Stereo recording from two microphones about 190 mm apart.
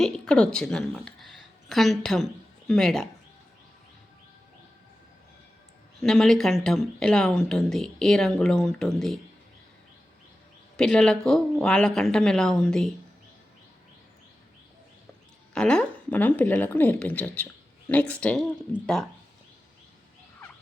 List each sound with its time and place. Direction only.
0.0 s a woman's voice: 5° left (ahead or behind)
6.0 s speech: centre (ahead or behind)
10.8 s speech: 5° left (ahead or behind)
15.5 s speech: 5° left (ahead or behind)